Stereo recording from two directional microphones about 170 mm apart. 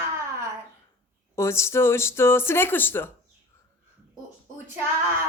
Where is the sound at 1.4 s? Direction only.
15° left (ahead or behind).